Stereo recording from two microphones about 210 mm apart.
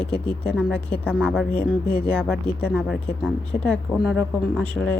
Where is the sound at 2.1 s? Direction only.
5° left (ahead or behind).